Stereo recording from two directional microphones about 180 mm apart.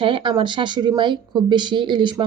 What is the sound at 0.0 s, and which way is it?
Speech, 30° right (ahead or behind).